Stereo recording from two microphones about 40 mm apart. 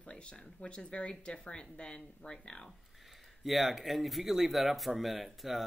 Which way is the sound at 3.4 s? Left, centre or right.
Centre.